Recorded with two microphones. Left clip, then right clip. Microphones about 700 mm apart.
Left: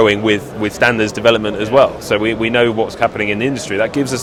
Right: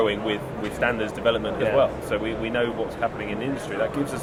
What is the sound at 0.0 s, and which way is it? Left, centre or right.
A man's voice, left.